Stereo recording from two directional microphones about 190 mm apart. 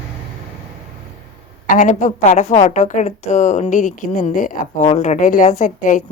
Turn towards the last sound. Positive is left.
turn(degrees=45)  # may be behind; listen again after turning